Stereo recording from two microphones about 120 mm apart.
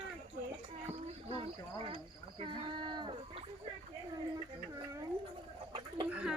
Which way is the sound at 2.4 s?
40° right (ahead or behind).